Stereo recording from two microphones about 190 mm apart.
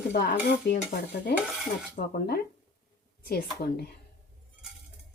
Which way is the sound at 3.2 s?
55° left (ahead or behind).